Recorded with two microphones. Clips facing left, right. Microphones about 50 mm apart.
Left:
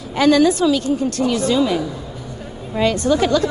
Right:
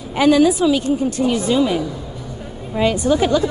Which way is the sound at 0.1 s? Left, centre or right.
Centre.